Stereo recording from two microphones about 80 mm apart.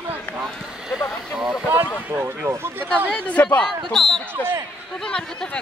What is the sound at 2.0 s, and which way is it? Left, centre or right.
Speech, right.